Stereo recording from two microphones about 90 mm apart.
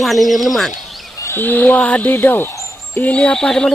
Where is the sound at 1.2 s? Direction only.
25° left (ahead or behind).